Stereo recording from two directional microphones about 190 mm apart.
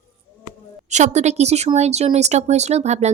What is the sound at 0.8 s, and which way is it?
Speech, 40° right (ahead or behind).